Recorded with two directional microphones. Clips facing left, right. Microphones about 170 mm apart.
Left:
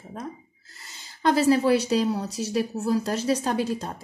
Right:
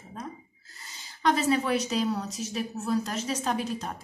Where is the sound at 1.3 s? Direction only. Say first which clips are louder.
Left 10 dB; 30° left (ahead or behind).